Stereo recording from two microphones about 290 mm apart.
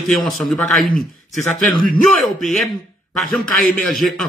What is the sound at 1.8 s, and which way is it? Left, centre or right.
Speech, right.